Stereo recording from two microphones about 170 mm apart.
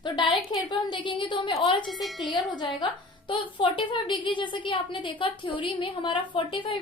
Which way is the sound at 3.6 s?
30° left (ahead or behind).